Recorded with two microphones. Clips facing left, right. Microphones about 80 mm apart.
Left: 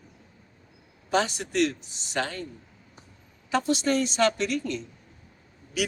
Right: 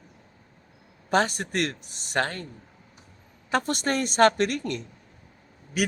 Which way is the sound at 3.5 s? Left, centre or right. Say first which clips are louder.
Left 1 dB; right.